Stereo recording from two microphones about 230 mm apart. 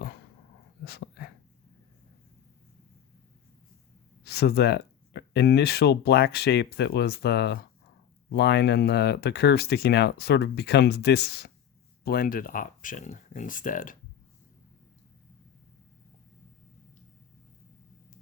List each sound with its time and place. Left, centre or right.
0.9 s dog: left
4.2 s speech: left